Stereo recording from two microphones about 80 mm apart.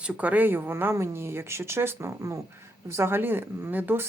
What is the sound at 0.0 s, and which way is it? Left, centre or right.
Speech, centre.